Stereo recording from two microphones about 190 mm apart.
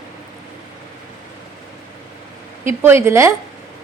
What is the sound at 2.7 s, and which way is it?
Speech, 15° right (ahead or behind).